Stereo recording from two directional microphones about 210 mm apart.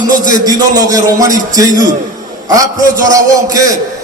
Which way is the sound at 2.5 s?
15° right (ahead or behind).